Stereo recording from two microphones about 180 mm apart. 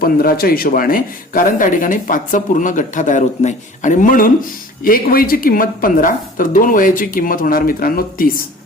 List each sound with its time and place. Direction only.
0.0 s a man's voice: 55° left (ahead or behind)